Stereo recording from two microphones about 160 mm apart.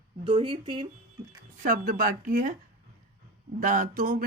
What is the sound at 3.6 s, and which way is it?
Speech, 55° right (ahead or behind).